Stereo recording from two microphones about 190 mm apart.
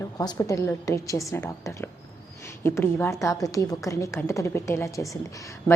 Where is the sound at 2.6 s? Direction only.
10° left (ahead or behind).